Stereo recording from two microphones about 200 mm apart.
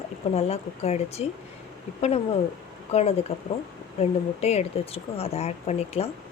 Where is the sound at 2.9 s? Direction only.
30° left (ahead or behind).